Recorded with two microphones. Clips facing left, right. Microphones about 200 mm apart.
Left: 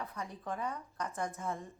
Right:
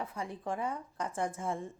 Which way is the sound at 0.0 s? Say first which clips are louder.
Right 4 dB; 25° right (ahead or behind).